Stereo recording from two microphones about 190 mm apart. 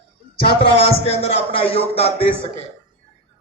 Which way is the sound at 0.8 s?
30° left (ahead or behind).